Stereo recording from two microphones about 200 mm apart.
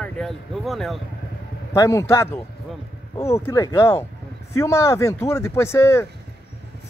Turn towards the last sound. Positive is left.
turn(degrees=15)  # may be behind; listen again after turning